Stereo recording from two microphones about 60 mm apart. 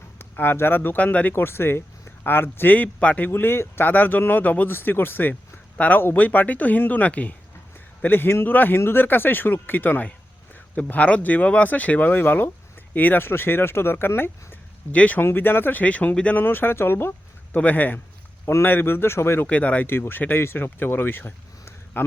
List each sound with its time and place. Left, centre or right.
0.2 s speech: left
1.0 s speech: left
1.3 s speech: left
5.3 s a sound: left
6.1 s speech: left
8.0 s speech: left
14.9 s speech: left
15.2 s speech: left
16.3 s speech: left
17.5 s speech: left
19.5 s speech: left
19.9 s speech: left